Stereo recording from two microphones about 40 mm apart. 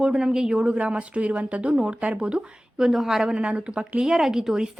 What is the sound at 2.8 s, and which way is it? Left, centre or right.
Speech, centre.